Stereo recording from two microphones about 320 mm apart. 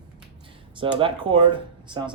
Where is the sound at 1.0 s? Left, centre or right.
Centre.